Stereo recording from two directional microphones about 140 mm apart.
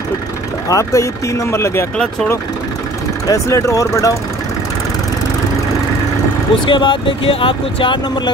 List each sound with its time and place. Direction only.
0.7 s speech: 20° left (ahead or behind)
3.3 s speech: 20° left (ahead or behind)
6.6 s speech: 35° left (ahead or behind)